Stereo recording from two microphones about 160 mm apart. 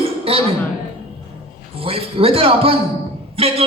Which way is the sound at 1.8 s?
35° right (ahead or behind).